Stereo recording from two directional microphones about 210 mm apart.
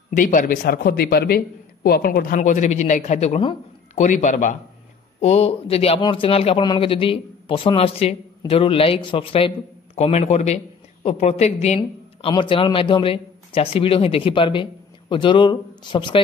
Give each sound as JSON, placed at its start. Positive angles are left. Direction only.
{"t": 0.1, "sound": "a man's voice", "side_deg": 40}